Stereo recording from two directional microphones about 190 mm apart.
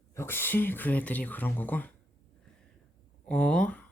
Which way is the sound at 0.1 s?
15° left (ahead or behind).